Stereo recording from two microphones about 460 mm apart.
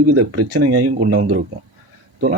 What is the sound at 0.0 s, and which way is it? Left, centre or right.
Speech, right.